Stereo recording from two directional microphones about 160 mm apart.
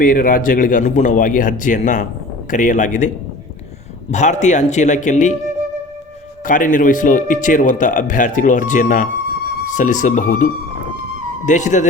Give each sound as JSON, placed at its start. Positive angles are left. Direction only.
{"t": 0.0, "sound": "a man's voice", "side_deg": 60}
{"t": 4.1, "sound": "a man's voice", "side_deg": 50}
{"t": 6.4, "sound": "a man's voice", "side_deg": 55}